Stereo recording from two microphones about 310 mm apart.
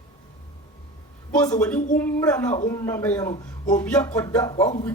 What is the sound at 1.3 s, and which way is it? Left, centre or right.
Speech, centre.